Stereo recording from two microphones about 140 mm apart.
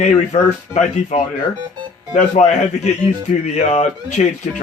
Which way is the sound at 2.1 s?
55° left (ahead or behind).